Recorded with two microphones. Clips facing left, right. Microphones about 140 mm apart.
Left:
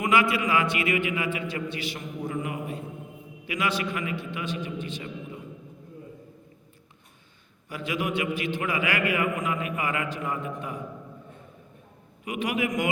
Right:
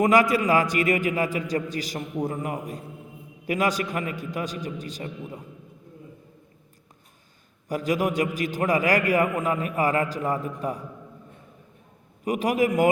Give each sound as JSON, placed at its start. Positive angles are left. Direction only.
{"t": 0.0, "sound": "a man's voice", "side_deg": -40}
{"t": 7.7, "sound": "a man's voice", "side_deg": -40}
{"t": 12.2, "sound": "a man's voice", "side_deg": -40}